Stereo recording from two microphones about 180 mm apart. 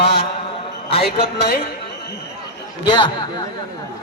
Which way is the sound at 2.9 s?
25° left (ahead or behind).